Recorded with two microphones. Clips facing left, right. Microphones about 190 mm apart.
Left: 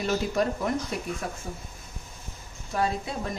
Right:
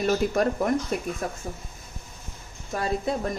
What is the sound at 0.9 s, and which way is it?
Speech, 50° right (ahead or behind).